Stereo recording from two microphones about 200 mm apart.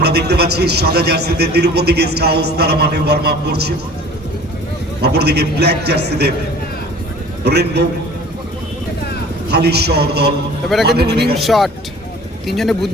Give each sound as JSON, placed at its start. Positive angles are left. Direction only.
{"t": 0.0, "sound": "a man's voice", "side_deg": -55}
{"t": 5.0, "sound": "a man's voice", "side_deg": -55}
{"t": 7.4, "sound": "a man's voice", "side_deg": -55}
{"t": 9.5, "sound": "a man's voice", "side_deg": -55}
{"t": 11.3, "sound": "speech", "side_deg": 0}